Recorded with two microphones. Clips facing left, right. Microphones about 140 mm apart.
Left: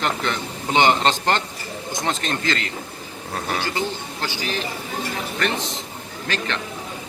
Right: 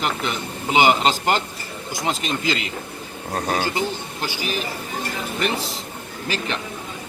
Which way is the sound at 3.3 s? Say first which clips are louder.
Right 3 dB; 40° right (ahead or behind).